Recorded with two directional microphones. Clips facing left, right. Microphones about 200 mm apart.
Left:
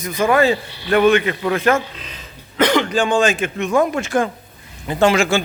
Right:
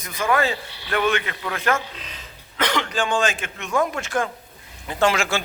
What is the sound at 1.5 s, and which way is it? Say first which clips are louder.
A man's voice: left 6 dB; 20° left (ahead or behind).